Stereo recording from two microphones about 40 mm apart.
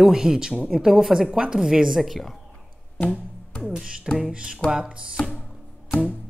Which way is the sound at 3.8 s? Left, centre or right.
Right.